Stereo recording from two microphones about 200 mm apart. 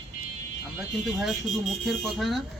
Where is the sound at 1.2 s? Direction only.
Centre (ahead or behind).